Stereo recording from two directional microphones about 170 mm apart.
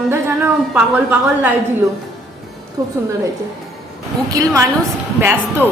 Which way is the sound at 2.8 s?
20° right (ahead or behind).